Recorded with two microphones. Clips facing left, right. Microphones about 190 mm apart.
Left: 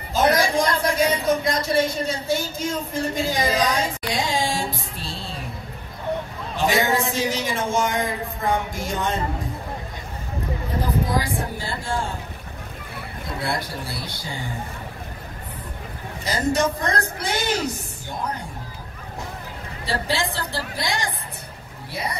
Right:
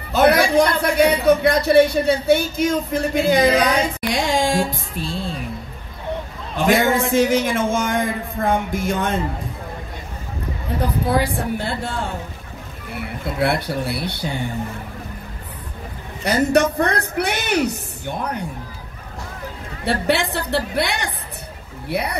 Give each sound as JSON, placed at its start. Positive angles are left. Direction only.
{"t": 0.1, "sound": "a man's voice", "side_deg": -65}
{"t": 6.5, "sound": "a man's voice", "side_deg": -50}
{"t": 11.1, "sound": "a man's voice", "side_deg": -65}
{"t": 13.4, "sound": "a man's voice", "side_deg": -65}
{"t": 16.3, "sound": "a man's voice", "side_deg": -65}
{"t": 19.8, "sound": "a man's voice", "side_deg": -65}